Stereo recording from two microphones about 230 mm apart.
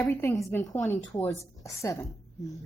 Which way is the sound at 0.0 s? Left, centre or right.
Centre.